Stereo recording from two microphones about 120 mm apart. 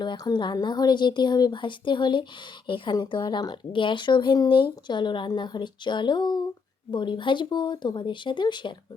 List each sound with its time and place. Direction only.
0.0 s speech: 40° left (ahead or behind)